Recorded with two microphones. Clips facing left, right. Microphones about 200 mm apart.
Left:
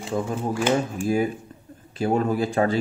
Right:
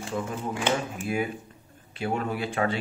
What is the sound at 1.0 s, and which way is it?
Speech, 35° left (ahead or behind).